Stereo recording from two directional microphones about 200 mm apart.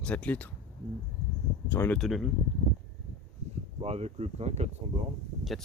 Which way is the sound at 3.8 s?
30° right (ahead or behind).